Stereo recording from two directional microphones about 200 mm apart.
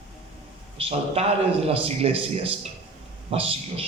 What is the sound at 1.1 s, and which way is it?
A man's voice, 30° right (ahead or behind).